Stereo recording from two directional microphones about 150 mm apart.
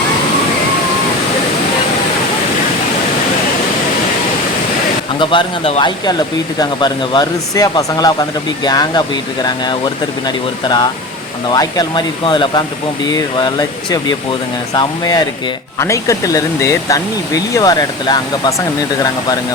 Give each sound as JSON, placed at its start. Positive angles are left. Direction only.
{"t": 5.2, "sound": "speech", "side_deg": 35}